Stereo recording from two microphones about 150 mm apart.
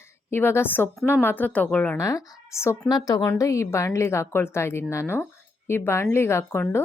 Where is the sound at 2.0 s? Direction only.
20° left (ahead or behind).